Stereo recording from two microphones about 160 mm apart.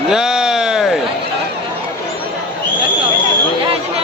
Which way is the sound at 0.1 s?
5° right (ahead or behind).